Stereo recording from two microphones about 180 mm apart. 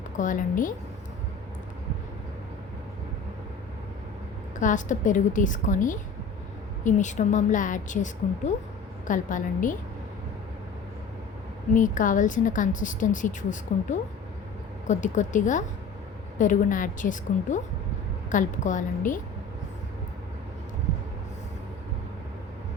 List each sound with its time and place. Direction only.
0.2 s a woman's voice: 45° left (ahead or behind)
4.6 s a woman's voice: 45° left (ahead or behind)
11.7 s a woman's voice: 45° left (ahead or behind)
14.8 s a woman's voice: 45° left (ahead or behind)